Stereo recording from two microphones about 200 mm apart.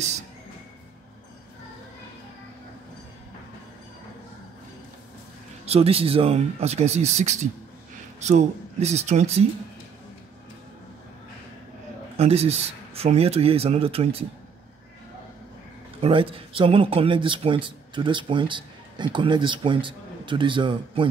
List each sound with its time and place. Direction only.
5.7 s speech: 30° right (ahead or behind)
12.2 s speech: 30° right (ahead or behind)
16.0 s speech: 25° right (ahead or behind)